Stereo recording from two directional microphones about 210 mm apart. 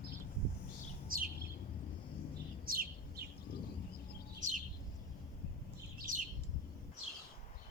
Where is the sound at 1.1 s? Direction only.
45° right (ahead or behind).